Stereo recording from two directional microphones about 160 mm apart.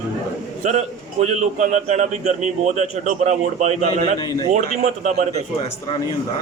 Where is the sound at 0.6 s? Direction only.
45° right (ahead or behind).